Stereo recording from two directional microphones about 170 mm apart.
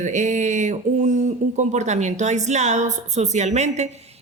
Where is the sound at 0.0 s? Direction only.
45° right (ahead or behind).